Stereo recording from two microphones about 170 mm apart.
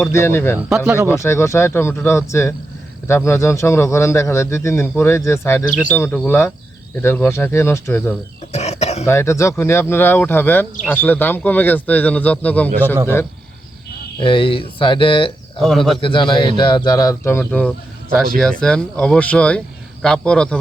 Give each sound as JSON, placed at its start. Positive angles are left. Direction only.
{"t": 0.0, "sound": "a man's voice", "side_deg": 15}
{"t": 8.5, "sound": "a sound", "side_deg": 40}
{"t": 9.0, "sound": "a man's voice", "side_deg": 15}
{"t": 14.2, "sound": "speech", "side_deg": 30}